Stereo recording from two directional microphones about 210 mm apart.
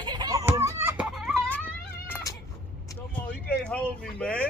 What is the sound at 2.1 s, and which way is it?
Cat, 15° left (ahead or behind).